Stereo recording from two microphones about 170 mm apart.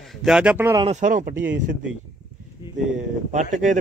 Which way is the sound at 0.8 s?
45° right (ahead or behind).